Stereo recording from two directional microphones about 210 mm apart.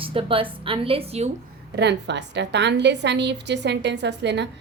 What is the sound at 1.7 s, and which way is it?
A woman's voice, 55° right (ahead or behind).